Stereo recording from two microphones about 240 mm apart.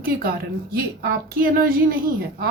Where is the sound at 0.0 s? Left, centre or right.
Right.